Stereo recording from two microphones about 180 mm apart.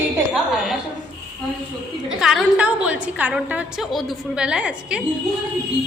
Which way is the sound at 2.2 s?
Centre (ahead or behind).